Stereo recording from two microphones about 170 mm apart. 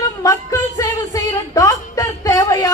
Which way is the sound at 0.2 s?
20° left (ahead or behind).